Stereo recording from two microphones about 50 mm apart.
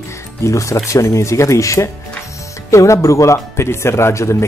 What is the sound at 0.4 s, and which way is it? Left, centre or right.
Speech, left.